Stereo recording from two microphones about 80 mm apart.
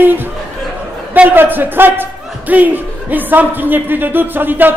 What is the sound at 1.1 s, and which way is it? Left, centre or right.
Speech, right.